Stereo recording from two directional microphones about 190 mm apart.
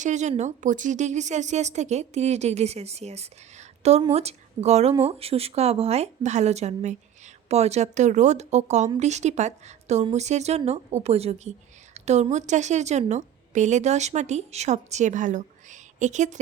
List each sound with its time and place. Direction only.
0.0 s a woman's voice: 40° right (ahead or behind)